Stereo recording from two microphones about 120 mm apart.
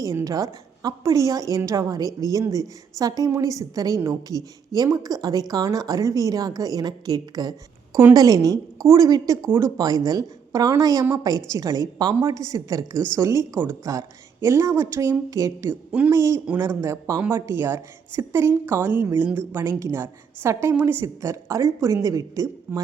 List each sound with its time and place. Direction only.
0.0 s a woman's voice: 25° right (ahead or behind)
15.7 s speech: 15° right (ahead or behind)
16.1 s a woman's voice: 25° right (ahead or behind)
17.2 s a woman's voice: 15° right (ahead or behind)